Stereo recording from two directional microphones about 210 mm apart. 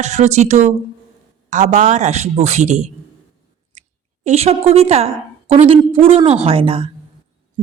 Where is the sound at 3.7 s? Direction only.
35° right (ahead or behind).